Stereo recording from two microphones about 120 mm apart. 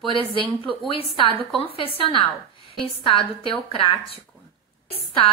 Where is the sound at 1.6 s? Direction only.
50° left (ahead or behind).